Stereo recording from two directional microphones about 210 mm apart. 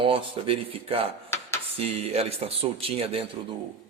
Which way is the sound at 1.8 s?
30° right (ahead or behind).